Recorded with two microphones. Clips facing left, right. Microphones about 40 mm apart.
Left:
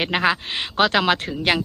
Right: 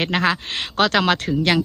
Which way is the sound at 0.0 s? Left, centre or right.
Centre.